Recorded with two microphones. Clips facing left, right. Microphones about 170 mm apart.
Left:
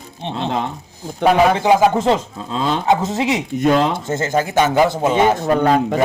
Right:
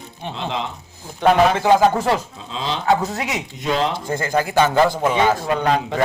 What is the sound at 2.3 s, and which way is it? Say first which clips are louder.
Speech: left 6 dB; 50° left (ahead or behind).